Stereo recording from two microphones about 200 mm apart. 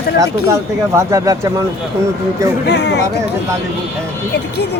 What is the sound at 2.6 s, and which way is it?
Speech, 60° left (ahead or behind).